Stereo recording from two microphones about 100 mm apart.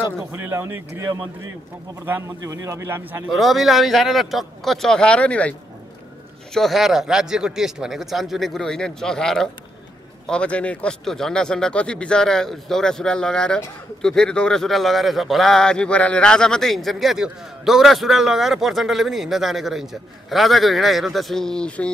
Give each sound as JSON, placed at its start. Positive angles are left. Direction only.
{"t": 0.2, "sound": "a man's voice", "side_deg": -25}
{"t": 2.2, "sound": "a man's voice", "side_deg": -30}
{"t": 3.3, "sound": "a man's voice", "side_deg": 0}
{"t": 6.5, "sound": "a man's voice", "side_deg": 0}